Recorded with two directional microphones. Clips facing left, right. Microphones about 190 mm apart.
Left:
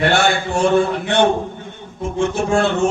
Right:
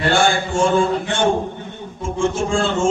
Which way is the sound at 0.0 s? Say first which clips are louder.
Left 1 dB; 65° left (ahead or behind).